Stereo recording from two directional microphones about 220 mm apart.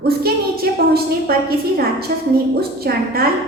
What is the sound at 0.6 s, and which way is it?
Speech, 45° right (ahead or behind).